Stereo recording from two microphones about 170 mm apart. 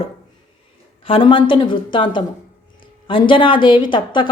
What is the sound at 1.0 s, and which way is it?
A woman's voice, 30° left (ahead or behind).